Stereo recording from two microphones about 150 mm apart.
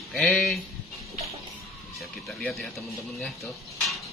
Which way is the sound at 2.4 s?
5° left (ahead or behind).